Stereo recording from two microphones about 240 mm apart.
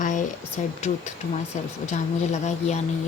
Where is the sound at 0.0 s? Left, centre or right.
Left.